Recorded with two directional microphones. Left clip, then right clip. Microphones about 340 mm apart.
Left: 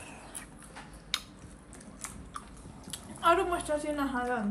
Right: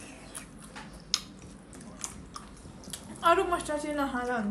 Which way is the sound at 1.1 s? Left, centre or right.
Centre.